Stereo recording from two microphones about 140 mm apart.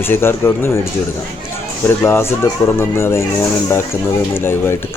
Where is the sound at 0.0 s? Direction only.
15° left (ahead or behind).